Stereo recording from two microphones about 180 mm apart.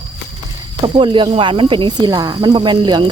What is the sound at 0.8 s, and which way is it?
Speech, 30° right (ahead or behind).